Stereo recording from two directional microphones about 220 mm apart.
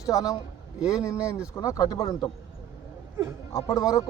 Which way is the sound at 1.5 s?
15° left (ahead or behind).